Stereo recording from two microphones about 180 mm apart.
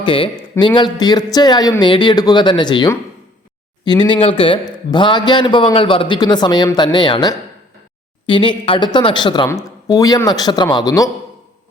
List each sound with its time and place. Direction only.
0.0 s a man's voice: 30° left (ahead or behind)